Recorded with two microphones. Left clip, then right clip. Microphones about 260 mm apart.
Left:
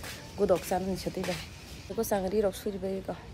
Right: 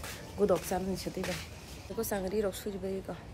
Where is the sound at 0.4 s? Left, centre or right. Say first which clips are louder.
Left 2 dB; centre.